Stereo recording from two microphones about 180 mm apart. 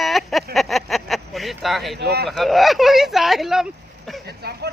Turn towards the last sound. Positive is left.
turn(degrees=0)  # may be behind; listen again after turning